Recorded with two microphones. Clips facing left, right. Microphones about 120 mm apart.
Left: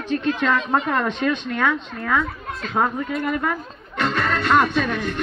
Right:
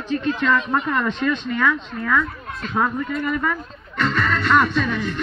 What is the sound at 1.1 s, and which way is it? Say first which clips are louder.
Speech: even; 60° left (ahead or behind).